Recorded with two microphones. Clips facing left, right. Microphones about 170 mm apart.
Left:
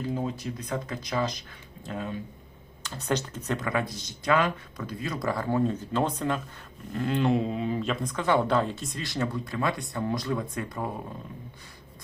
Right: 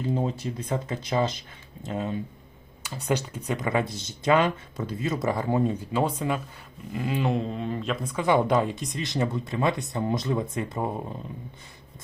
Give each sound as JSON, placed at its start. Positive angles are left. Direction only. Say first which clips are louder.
{"t": 0.1, "sound": "speech", "louder": "right 3 dB", "side_deg": -25}
{"t": 2.8, "sound": "speech", "louder": "right 2 dB", "side_deg": -10}
{"t": 3.7, "sound": "speech", "louder": "right 3 dB", "side_deg": -25}
{"t": 8.1, "sound": "speech", "louder": "right 3 dB", "side_deg": -10}